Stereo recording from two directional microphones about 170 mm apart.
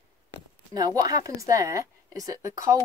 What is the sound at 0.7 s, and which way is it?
Speech, 20° right (ahead or behind).